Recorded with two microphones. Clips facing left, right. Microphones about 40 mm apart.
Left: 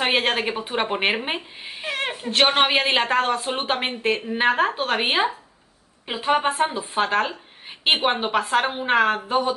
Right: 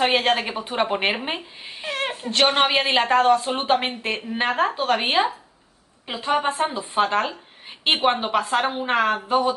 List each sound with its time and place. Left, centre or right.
0.0 s a woman's voice: centre
6.9 s a woman's voice: centre